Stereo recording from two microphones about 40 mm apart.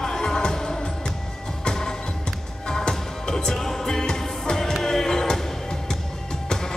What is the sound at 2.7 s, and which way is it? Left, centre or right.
Music, centre.